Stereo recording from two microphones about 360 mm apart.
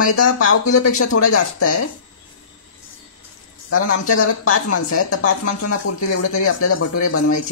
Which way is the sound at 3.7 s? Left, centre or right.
Left.